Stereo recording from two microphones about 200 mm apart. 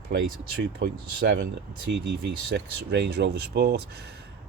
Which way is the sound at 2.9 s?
55° right (ahead or behind).